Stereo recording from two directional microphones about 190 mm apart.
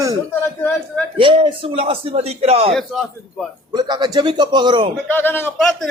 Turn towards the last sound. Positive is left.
turn(degrees=5)  # may be behind; listen again after turning